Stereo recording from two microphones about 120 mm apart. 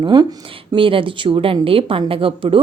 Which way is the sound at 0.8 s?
45° right (ahead or behind).